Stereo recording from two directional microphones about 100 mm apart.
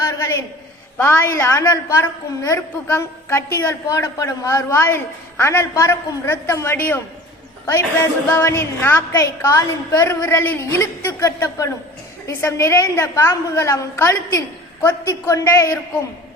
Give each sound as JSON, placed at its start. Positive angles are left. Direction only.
{"t": 0.0, "sound": "a sound", "side_deg": 30}
{"t": 0.9, "sound": "a woman's voice", "side_deg": 25}
{"t": 8.3, "sound": "a woman's voice", "side_deg": 25}